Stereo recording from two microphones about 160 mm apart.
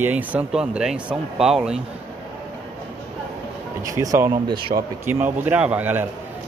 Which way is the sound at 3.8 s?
20° right (ahead or behind).